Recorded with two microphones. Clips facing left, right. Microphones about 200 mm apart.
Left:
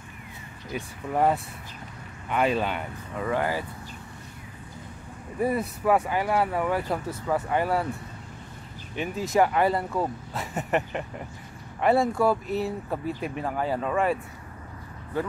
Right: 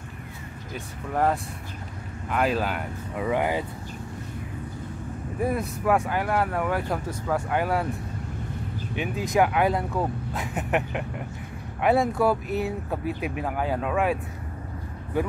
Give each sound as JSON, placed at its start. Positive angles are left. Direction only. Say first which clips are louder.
{"t": 0.7, "sound": "speech", "louder": "left 1 dB", "side_deg": 5}
{"t": 3.3, "sound": "speech", "louder": "right 2 dB", "side_deg": -15}
{"t": 5.4, "sound": "speech", "louder": "left 1 dB", "side_deg": 0}
{"t": 8.9, "sound": "speech", "louder": "even", "side_deg": 0}